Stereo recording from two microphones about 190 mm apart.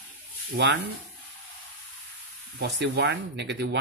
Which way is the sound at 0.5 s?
55° right (ahead or behind).